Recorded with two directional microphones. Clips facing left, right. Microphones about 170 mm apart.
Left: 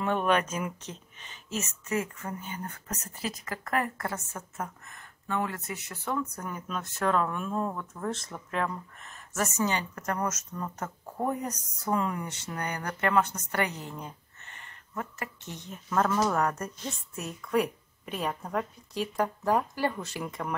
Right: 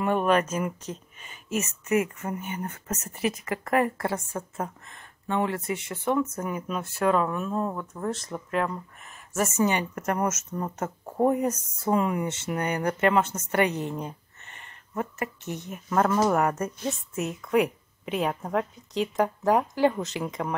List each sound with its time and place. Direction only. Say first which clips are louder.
0.0 s speech: right 3 dB; 10° right (ahead or behind); by 6.2 s 25° right (ahead or behind)
6.4 s speech: right 5 dB; 10° right (ahead or behind)
9.3 s speech: right 5 dB; 15° right (ahead or behind)
16.3 s a woman's voice: right 4 dB; 5° right (ahead or behind)
17.2 s speech: right 4 dB; 20° right (ahead or behind)